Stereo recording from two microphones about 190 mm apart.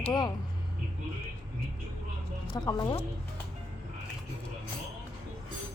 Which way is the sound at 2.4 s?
20° left (ahead or behind).